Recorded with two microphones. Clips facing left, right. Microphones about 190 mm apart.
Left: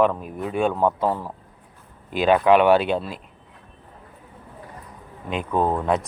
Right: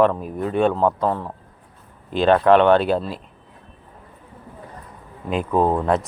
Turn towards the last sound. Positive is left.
turn(degrees=0)  # may be behind; listen again after turning